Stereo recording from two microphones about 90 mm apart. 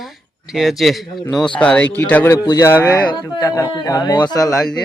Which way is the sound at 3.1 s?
50° left (ahead or behind).